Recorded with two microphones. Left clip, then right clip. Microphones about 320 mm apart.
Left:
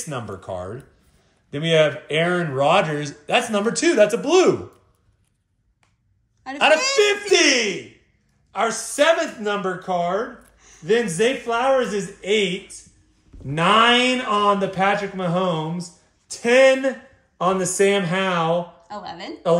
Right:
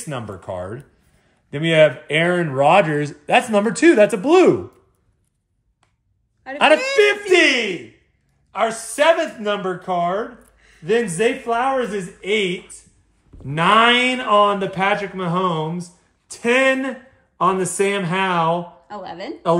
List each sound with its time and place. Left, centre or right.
0.1 s a man's voice: centre
7.0 s a man's voice: right
18.9 s speech: centre